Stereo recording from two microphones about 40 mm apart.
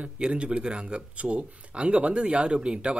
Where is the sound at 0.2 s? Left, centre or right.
Right.